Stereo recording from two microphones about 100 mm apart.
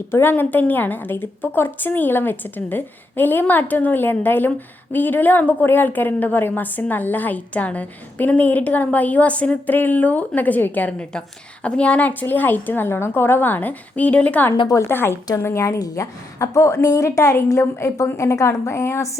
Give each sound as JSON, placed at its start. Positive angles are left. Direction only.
{"t": 0.1, "sound": "a woman's voice", "side_deg": 20}
{"t": 14.7, "sound": "a woman's voice", "side_deg": 25}